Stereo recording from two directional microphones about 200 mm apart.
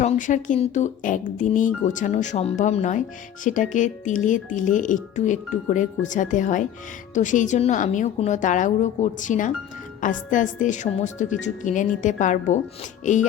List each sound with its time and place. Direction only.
0.0 s speech: 40° left (ahead or behind)